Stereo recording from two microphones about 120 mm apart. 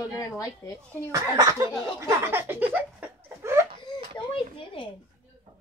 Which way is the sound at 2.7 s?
15° right (ahead or behind).